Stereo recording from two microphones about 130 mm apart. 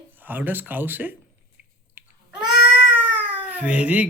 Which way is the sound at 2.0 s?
15° right (ahead or behind).